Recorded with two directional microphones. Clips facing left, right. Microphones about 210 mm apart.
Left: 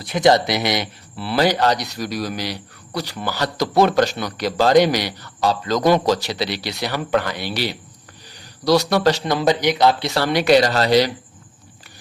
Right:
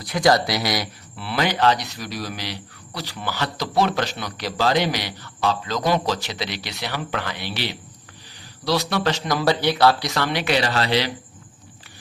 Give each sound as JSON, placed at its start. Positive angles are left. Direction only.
{"t": 0.0, "sound": "speech", "side_deg": 25}
{"t": 1.1, "sound": "a man's voice", "side_deg": 35}
{"t": 10.1, "sound": "a man's voice", "side_deg": 35}